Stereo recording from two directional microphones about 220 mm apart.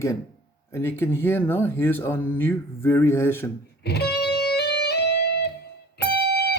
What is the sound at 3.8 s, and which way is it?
Music, 50° left (ahead or behind).